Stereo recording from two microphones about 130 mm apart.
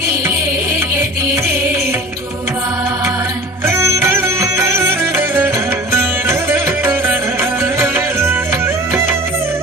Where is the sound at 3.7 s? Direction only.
25° right (ahead or behind).